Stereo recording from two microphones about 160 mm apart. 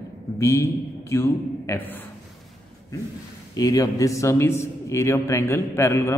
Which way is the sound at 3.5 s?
20° left (ahead or behind).